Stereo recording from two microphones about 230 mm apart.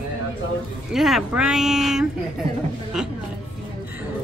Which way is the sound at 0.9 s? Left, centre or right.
Centre.